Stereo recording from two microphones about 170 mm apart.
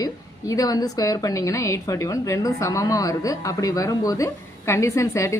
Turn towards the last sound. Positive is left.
turn(degrees=15)  # may be behind; listen again after turning